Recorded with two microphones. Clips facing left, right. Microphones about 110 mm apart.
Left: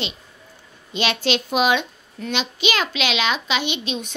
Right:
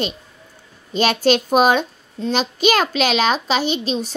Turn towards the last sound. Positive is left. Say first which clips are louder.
# right 5 dB
turn(degrees=-35)  # may be behind; listen again after turning